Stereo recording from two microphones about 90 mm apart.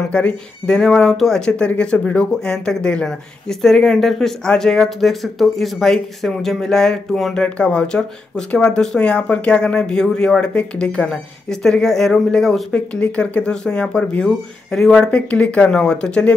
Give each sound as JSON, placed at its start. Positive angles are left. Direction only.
{"t": 0.1, "sound": "speech", "side_deg": 10}
{"t": 7.4, "sound": "speech", "side_deg": 10}